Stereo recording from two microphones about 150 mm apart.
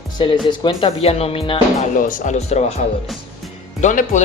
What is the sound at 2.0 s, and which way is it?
Speech, 65° left (ahead or behind).